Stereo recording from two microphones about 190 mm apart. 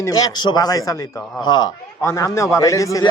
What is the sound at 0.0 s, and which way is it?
Speech, 20° left (ahead or behind).